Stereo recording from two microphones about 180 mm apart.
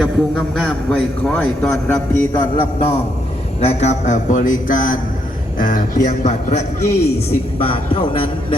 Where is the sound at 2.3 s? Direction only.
25° left (ahead or behind).